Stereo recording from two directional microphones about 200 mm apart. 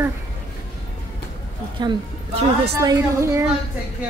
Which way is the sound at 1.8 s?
25° right (ahead or behind).